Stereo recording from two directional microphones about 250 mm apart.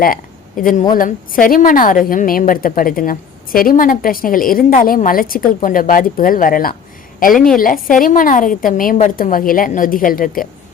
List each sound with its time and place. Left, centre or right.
0.0 s a woman's voice: left
7.3 s a woman's voice: centre
7.6 s a woman's voice: left